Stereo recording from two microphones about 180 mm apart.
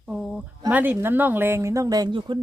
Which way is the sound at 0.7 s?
10° right (ahead or behind).